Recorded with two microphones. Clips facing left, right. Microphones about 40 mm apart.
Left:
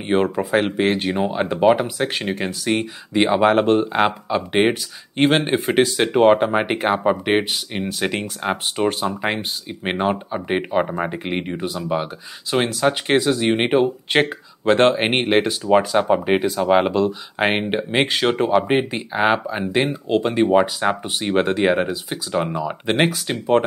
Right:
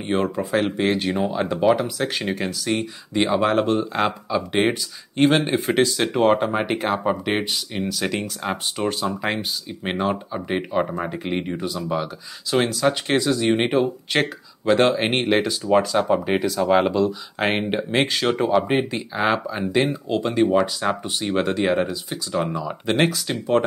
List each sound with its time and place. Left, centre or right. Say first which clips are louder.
0.0 s speech: left 3 dB; left